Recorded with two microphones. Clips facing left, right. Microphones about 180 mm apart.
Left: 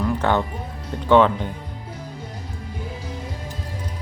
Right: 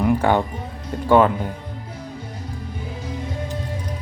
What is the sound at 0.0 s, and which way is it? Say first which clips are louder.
Music: right 3 dB; 10° right (ahead or behind).